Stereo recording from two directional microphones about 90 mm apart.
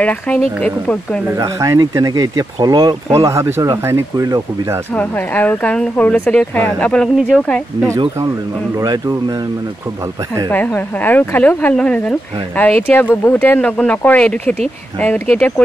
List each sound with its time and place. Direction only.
0.0 s speech: 15° left (ahead or behind)
1.3 s speech: 40° right (ahead or behind); by 3.0 s 55° right (ahead or behind)
3.3 s speech: 30° right (ahead or behind)
4.9 s speech: 20° left (ahead or behind)
8.8 s speech: 50° right (ahead or behind)
10.5 s speech: 15° left (ahead or behind)